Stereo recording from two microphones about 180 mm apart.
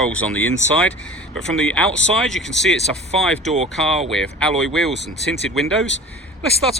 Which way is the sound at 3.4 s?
35° right (ahead or behind).